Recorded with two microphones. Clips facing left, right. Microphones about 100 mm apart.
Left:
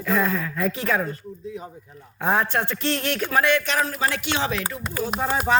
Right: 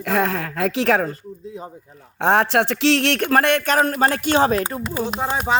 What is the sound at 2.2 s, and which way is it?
Speech, 75° right (ahead or behind).